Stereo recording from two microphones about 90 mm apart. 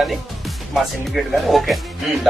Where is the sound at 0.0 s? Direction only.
Centre (ahead or behind).